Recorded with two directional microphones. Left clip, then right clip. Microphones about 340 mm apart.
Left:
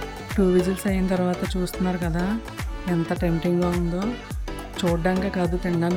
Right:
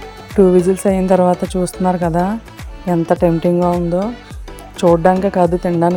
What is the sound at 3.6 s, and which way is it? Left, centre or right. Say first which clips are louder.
Speech: right 10 dB; centre.